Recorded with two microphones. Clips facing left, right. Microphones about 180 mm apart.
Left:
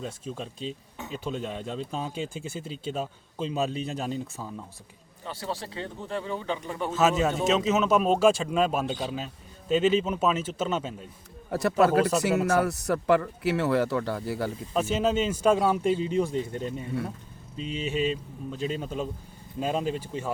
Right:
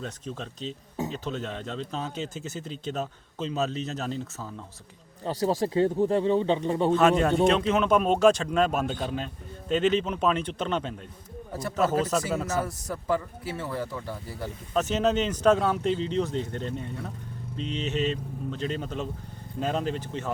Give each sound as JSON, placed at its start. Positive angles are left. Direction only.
{"t": 0.0, "sound": "speech", "side_deg": 5}
{"t": 5.2, "sound": "speech", "side_deg": -40}
{"t": 6.9, "sound": "speech", "side_deg": 5}
{"t": 12.5, "sound": "a man's voice", "side_deg": 75}
{"t": 14.7, "sound": "speech", "side_deg": 10}